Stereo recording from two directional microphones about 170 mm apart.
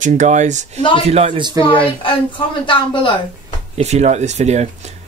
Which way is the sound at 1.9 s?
30° left (ahead or behind).